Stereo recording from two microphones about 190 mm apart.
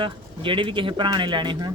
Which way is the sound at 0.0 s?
25° right (ahead or behind).